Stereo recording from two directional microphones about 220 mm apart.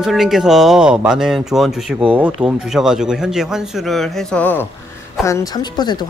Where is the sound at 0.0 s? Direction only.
Centre (ahead or behind).